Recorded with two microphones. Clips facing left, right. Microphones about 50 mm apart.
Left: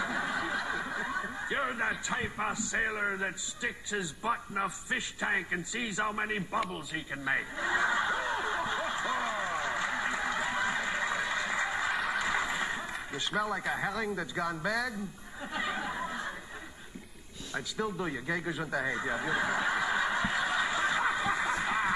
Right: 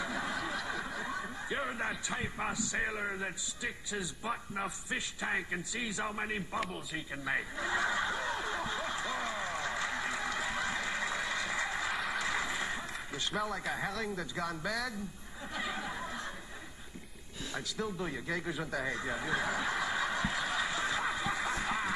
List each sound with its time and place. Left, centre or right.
0.0 s snicker: centre
1.5 s a man's voice: left
7.1 s snicker: centre
9.4 s a sound: left
11.9 s neigh: centre
13.2 s speech: centre
15.5 s a sound: centre
16.1 s chuckle: centre
18.0 s speech: centre
19.0 s a sound: centre
20.3 s snicker: centre
21.3 s a sound: centre